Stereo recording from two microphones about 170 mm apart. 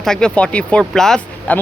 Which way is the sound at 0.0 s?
5° left (ahead or behind).